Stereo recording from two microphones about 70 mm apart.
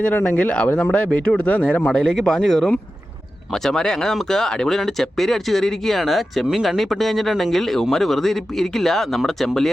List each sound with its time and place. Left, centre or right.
0.0 s speech: left; by 9.6 s centre